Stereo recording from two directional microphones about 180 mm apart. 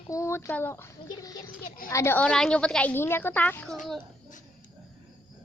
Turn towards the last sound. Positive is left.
turn(degrees=10)  # may be behind; listen again after turning